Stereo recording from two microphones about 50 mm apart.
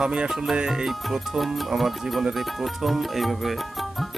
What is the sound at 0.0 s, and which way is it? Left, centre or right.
Speech, right.